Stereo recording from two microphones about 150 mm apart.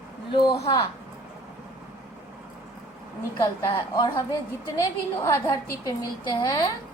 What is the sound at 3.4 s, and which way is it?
A woman's voice, 30° left (ahead or behind).